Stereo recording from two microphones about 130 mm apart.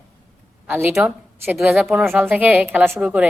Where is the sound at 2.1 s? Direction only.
15° right (ahead or behind).